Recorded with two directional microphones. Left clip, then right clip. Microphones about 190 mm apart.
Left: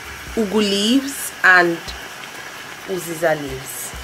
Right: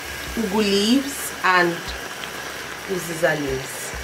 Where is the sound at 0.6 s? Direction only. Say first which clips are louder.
Right 1 dB; 30° left (ahead or behind).